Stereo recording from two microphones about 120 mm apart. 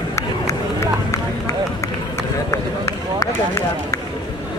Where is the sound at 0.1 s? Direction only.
25° left (ahead or behind).